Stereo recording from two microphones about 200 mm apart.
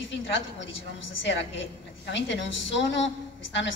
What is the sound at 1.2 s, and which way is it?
A woman's voice, 60° left (ahead or behind).